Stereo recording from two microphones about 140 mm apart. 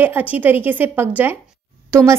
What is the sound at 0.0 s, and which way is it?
A woman's voice, 10° right (ahead or behind).